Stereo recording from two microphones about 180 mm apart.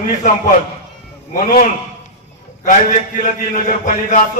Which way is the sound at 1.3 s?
45° left (ahead or behind).